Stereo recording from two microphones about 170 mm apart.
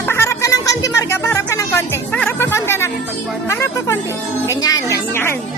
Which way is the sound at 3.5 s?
15° left (ahead or behind).